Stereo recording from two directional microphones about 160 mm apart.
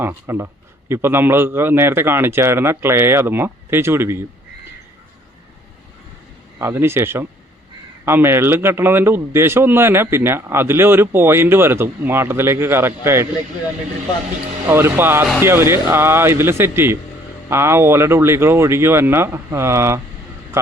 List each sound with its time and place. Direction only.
0.0 s a man's voice: 15° right (ahead or behind)
6.6 s a man's voice: 15° right (ahead or behind)
14.7 s a man's voice: 15° right (ahead or behind)